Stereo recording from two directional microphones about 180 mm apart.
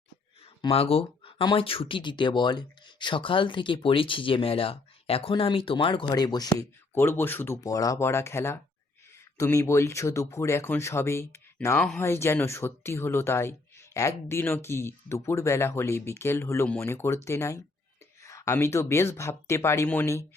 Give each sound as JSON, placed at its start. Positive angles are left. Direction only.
{"t": 0.6, "sound": "speech", "side_deg": 30}